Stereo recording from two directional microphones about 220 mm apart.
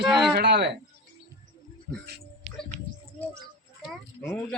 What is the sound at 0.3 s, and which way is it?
Speech, 50° right (ahead or behind).